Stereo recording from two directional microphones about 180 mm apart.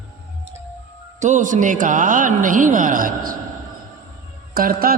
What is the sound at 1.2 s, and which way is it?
A man's voice, 45° right (ahead or behind).